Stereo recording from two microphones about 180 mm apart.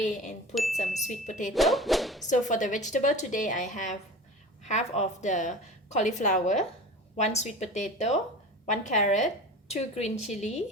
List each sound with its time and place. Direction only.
0.0 s a woman's voice: 40° left (ahead or behind)
1.5 s speech: centre (ahead or behind)
2.2 s a woman's voice: 45° left (ahead or behind)